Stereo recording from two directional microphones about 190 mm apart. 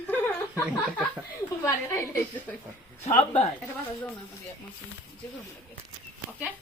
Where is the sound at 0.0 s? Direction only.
10° left (ahead or behind).